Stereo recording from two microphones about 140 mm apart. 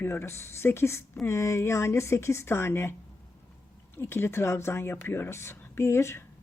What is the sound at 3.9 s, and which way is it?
Speech, 15° left (ahead or behind).